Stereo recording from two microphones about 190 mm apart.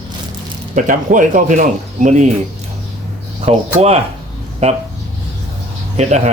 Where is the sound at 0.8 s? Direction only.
45° right (ahead or behind).